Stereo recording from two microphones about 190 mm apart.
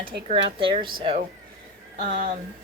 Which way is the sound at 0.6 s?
25° right (ahead or behind).